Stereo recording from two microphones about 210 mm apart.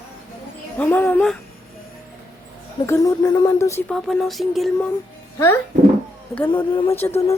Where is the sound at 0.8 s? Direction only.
10° left (ahead or behind).